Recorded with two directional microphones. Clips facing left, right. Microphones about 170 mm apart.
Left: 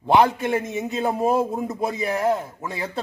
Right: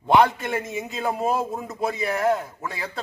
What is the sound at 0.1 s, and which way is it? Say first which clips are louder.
A man's voice: left 1 dB; 15° left (ahead or behind).